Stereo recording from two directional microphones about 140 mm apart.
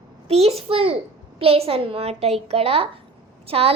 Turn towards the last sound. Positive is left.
turn(degrees=-45)  # may be behind; listen again after turning